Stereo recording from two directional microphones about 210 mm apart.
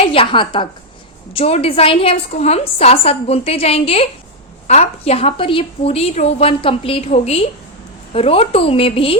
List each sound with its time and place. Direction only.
0.1 s a woman's voice: 25° left (ahead or behind)